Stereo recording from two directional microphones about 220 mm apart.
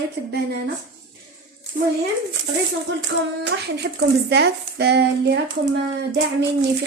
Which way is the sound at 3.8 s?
55° right (ahead or behind).